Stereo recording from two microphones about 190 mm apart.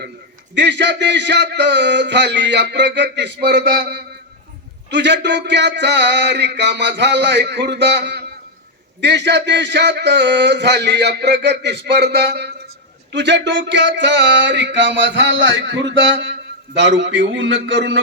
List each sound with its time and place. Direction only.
0.5 s a man's voice: 65° right (ahead or behind)
4.9 s a man's voice: 65° right (ahead or behind)